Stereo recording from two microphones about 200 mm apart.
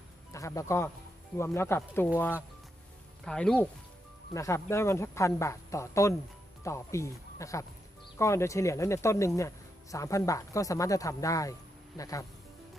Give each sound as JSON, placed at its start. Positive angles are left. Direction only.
{"t": 0.3, "sound": "speech", "side_deg": 15}
{"t": 3.2, "sound": "speech", "side_deg": 5}